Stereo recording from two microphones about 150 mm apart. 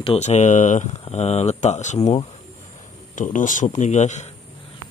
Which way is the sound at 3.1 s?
60° left (ahead or behind).